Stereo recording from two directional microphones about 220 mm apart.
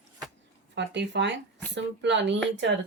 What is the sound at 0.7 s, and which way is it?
Speech, 55° right (ahead or behind).